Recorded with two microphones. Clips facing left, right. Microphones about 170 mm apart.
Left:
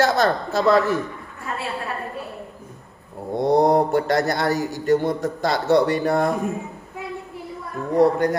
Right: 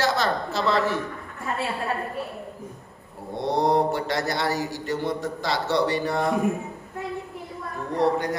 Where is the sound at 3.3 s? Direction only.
50° left (ahead or behind).